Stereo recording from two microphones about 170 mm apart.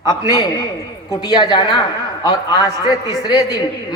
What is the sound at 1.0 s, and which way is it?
A man's voice, 25° left (ahead or behind).